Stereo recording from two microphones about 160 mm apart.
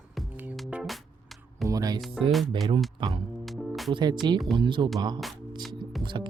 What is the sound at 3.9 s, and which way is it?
Music, 30° right (ahead or behind).